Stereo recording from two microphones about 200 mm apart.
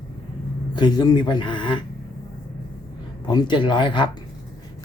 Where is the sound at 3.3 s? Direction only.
20° left (ahead or behind).